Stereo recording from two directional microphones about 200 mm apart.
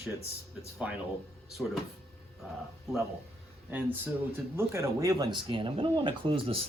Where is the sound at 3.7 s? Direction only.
10° right (ahead or behind).